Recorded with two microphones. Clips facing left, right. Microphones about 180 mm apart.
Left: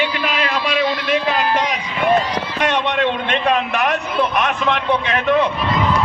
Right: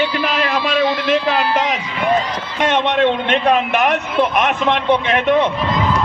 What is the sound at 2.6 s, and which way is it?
Speech, 20° right (ahead or behind).